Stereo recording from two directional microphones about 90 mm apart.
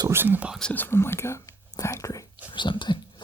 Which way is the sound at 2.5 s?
60° left (ahead or behind).